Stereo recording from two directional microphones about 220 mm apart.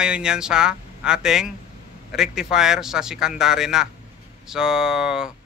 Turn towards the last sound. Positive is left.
turn(degrees=-5)  # may be behind; listen again after turning